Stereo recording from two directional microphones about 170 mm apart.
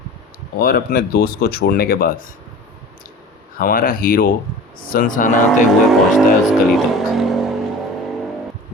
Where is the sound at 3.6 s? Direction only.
60° left (ahead or behind).